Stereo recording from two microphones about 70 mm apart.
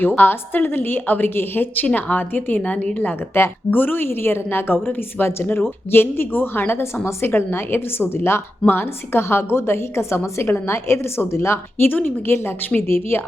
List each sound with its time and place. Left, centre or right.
0.2 s a woman's voice: left
11.9 s a woman's voice: left